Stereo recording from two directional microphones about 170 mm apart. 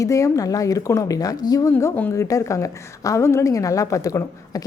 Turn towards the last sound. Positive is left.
turn(degrees=20)  # may be behind; listen again after turning